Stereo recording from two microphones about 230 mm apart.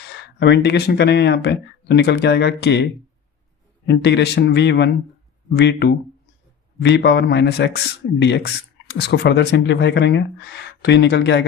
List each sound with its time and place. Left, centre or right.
0.1 s speech: left
3.8 s speech: left